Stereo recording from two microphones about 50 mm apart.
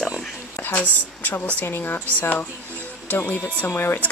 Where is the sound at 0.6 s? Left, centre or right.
Left.